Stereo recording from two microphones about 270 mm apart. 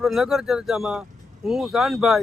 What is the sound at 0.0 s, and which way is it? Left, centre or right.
Speech, centre.